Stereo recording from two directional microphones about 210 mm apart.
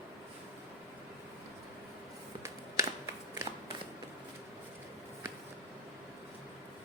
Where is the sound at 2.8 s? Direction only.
15° right (ahead or behind).